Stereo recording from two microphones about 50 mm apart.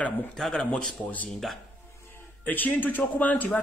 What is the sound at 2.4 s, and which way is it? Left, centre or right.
Speech, left.